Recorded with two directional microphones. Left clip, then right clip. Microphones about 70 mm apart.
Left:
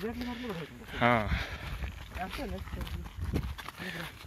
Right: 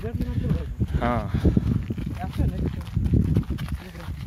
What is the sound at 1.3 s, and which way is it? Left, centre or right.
Speech, right.